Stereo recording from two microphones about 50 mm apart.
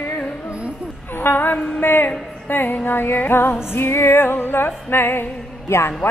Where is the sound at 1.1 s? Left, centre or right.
Left.